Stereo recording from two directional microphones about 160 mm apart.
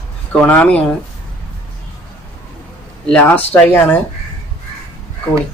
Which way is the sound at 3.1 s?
10° left (ahead or behind).